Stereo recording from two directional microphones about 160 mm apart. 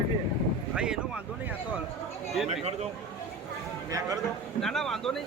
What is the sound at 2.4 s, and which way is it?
Speech, 40° right (ahead or behind).